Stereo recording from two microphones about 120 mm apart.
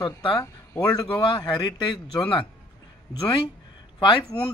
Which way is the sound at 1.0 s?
40° left (ahead or behind).